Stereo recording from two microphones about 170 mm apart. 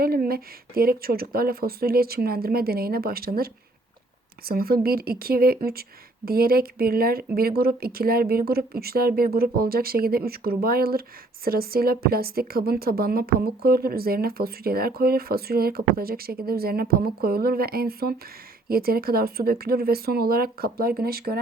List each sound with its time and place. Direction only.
0.0 s a woman's voice: 60° right (ahead or behind)